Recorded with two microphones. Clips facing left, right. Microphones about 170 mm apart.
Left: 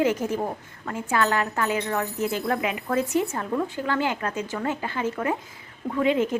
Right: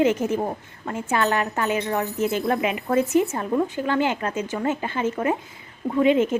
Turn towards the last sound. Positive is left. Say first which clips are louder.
# right 4 dB
turn(degrees=-20)  # may be behind; listen again after turning